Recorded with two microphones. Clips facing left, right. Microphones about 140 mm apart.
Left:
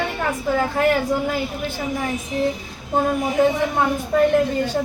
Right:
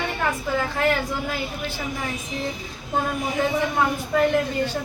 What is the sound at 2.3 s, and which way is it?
Child singing, 45° left (ahead or behind).